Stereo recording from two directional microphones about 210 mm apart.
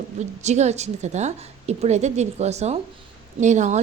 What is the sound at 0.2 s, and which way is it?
A woman's voice, 35° right (ahead or behind).